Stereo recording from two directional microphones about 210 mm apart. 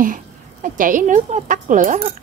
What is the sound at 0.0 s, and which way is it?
A woman's voice, 40° right (ahead or behind).